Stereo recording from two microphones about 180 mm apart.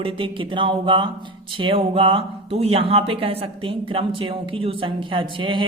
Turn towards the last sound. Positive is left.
turn(degrees=-25)  # may be behind; listen again after turning